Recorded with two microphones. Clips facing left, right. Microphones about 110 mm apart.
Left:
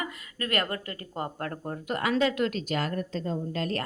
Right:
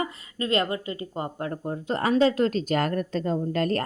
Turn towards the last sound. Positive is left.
turn(degrees=-50)  # may be behind; listen again after turning